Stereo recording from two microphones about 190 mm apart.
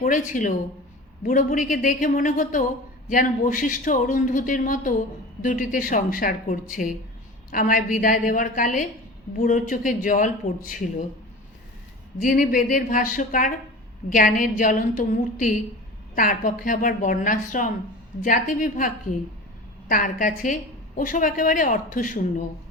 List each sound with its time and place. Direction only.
0.0 s a woman's voice: 45° left (ahead or behind)
12.2 s a woman's voice: 45° left (ahead or behind)
19.9 s a woman's voice: 45° left (ahead or behind)